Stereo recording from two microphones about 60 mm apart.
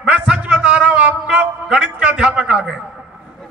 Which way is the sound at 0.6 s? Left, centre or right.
Centre.